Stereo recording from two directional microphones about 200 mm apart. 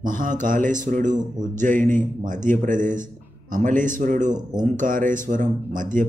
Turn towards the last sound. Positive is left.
turn(degrees=-40)  # may be behind; listen again after turning